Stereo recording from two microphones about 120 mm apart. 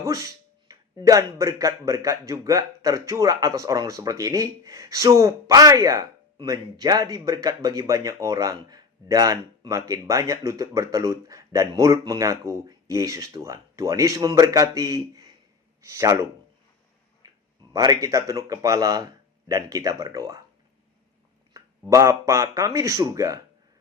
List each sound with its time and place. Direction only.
0.0 s speech: 25° right (ahead or behind)
17.2 s a sound: 30° right (ahead or behind)
17.7 s speech: 30° right (ahead or behind)
21.5 s speech: 25° right (ahead or behind)